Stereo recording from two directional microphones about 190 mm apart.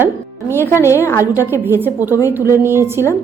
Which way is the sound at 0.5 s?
15° left (ahead or behind).